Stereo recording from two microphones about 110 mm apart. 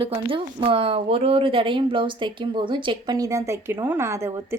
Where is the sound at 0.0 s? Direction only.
55° right (ahead or behind).